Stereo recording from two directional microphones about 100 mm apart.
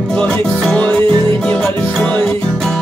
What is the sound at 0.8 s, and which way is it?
Music, 20° left (ahead or behind).